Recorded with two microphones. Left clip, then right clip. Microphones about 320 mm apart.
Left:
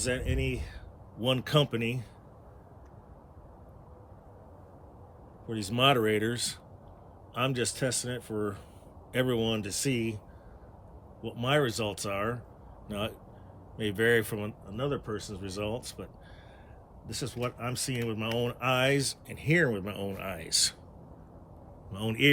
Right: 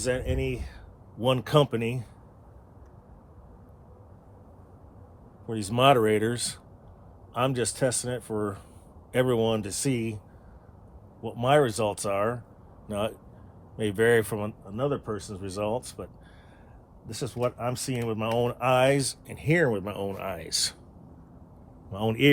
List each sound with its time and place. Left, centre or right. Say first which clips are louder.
0.0 s speech: right 4 dB; centre
5.5 s speech: right 5 dB; centre
11.2 s speech: right 6 dB; centre
17.1 s speech: right 5 dB; centre
21.9 s speech: right 3 dB; centre